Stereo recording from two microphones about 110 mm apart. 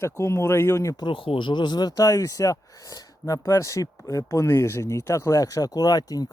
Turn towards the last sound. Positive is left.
turn(degrees=35)  # may be behind; listen again after turning